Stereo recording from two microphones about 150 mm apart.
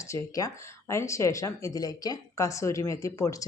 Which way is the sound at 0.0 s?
20° left (ahead or behind).